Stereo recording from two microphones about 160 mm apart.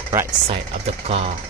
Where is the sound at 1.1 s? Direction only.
35° right (ahead or behind).